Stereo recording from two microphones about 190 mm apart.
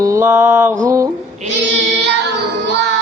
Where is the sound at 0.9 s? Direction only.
15° right (ahead or behind).